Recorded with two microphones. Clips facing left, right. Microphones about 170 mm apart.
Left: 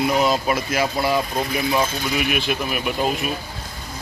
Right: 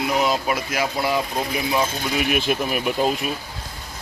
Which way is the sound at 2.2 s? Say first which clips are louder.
Right 3 dB; 40° right (ahead or behind).